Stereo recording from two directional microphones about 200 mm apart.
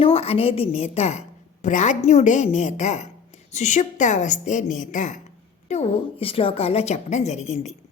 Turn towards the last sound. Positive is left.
turn(degrees=35)  # may be behind; listen again after turning